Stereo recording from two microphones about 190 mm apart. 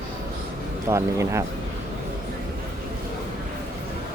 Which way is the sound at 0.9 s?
15° right (ahead or behind).